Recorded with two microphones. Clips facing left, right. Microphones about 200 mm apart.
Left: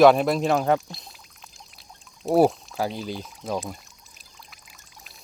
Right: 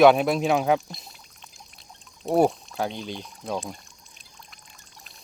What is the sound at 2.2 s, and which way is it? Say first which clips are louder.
Pour: left 2 dB; centre (ahead or behind).